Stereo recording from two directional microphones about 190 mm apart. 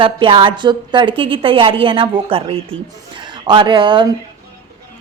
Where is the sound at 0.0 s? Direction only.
25° right (ahead or behind).